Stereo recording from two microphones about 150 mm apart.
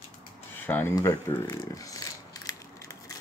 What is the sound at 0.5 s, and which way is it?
Speech, 15° left (ahead or behind).